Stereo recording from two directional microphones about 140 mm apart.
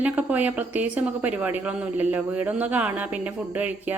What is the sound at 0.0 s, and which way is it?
Speech, 10° right (ahead or behind).